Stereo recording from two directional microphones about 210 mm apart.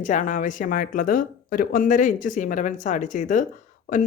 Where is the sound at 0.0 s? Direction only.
40° left (ahead or behind).